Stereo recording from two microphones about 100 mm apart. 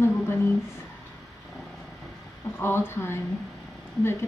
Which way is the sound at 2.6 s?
25° left (ahead or behind).